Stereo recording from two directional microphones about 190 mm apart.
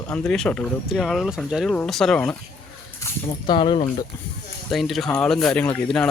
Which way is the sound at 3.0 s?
25° left (ahead or behind).